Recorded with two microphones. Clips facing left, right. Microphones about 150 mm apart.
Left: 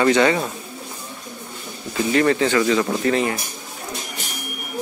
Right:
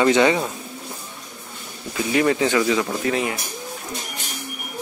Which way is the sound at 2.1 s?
15° right (ahead or behind).